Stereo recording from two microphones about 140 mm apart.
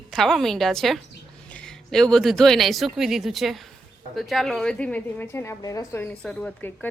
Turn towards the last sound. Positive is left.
turn(degrees=20)  # may be behind; listen again after turning